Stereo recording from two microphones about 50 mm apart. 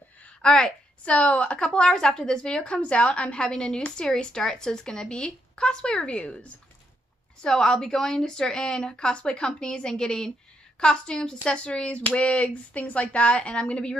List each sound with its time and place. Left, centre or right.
0.4 s a woman's voice: centre
7.4 s a woman's voice: centre